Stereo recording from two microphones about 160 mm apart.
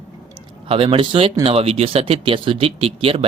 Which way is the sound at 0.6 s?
35° right (ahead or behind).